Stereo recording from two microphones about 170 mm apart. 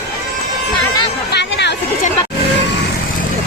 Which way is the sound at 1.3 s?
90° left.